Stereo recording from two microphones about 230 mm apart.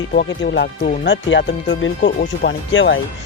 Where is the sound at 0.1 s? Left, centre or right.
Left.